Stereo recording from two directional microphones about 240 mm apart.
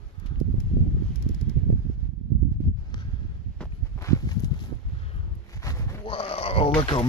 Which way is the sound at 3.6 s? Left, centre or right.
Centre.